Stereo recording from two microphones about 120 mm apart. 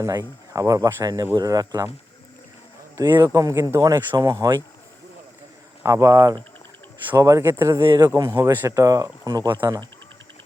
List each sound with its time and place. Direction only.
0.0 s speech: 25° right (ahead or behind)
2.9 s speech: 35° right (ahead or behind)
5.8 s speech: 25° right (ahead or behind)
7.9 s speech: 30° right (ahead or behind)